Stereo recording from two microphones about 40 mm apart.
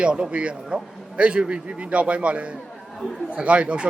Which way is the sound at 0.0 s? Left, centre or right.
Right.